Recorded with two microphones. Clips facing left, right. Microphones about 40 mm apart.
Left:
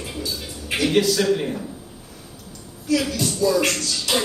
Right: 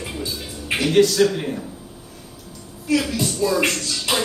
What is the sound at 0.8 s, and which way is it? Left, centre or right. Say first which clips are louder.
Speech: right 2 dB; centre.